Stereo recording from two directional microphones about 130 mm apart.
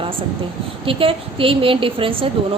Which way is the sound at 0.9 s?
45° right (ahead or behind).